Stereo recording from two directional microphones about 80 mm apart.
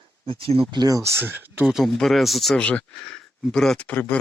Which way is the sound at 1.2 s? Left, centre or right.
Right.